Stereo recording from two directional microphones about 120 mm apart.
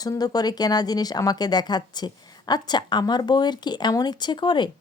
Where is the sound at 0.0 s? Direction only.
35° left (ahead or behind).